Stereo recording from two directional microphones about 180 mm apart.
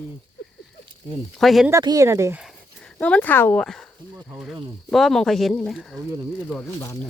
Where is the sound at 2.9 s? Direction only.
5° left (ahead or behind).